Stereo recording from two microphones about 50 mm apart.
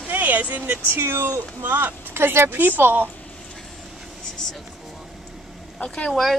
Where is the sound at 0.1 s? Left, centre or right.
Right.